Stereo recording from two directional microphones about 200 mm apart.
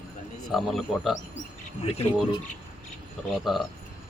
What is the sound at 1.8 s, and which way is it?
Speech, 30° left (ahead or behind).